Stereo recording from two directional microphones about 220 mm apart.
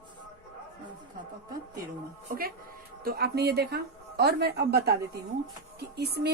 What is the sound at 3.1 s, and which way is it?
Speech, 45° right (ahead or behind).